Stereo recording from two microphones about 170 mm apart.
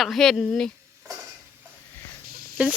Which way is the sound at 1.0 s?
15° right (ahead or behind).